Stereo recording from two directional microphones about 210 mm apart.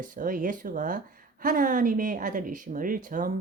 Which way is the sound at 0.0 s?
40° right (ahead or behind).